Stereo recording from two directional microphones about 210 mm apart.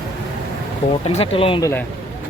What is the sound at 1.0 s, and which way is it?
Speech, 30° left (ahead or behind).